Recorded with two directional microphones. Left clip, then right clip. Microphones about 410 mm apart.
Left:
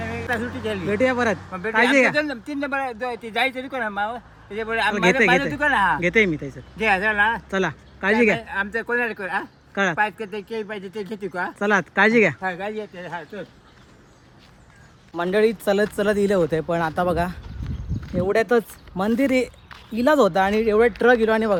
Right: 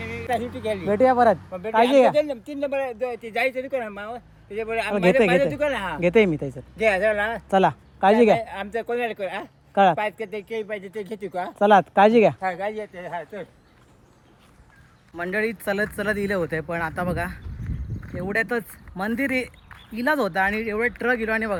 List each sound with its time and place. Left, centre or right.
0.0 s speech: centre
2.1 s speech: centre
6.7 s speech: centre
7.5 s speech: centre
15.1 s speech: centre